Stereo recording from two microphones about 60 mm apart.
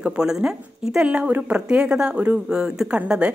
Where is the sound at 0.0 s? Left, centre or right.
Centre.